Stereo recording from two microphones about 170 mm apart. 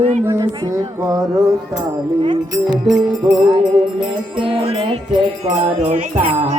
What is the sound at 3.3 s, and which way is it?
Music, 25° right (ahead or behind).